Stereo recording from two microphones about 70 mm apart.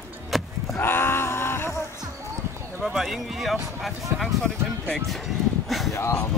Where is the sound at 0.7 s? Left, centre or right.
Left.